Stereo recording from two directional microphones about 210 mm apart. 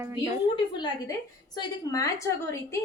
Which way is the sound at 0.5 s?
20° left (ahead or behind).